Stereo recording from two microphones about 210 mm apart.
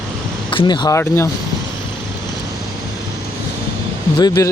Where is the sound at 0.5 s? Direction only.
20° left (ahead or behind).